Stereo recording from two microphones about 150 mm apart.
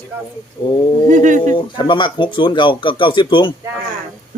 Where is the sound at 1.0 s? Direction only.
60° right (ahead or behind).